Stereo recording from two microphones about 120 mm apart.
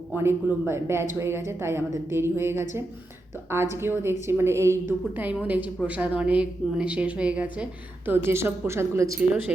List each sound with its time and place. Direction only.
0.1 s a woman's voice: 20° right (ahead or behind)